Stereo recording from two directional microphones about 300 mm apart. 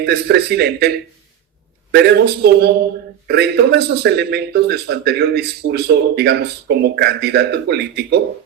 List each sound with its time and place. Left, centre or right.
0.0 s speech: right